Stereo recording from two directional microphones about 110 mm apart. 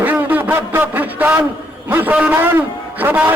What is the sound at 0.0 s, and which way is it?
A man's voice, 15° right (ahead or behind).